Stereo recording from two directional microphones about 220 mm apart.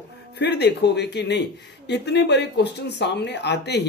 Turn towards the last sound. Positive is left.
turn(degrees=50)  # may be behind; listen again after turning